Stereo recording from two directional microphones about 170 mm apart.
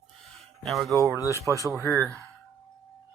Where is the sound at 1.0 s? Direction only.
20° right (ahead or behind).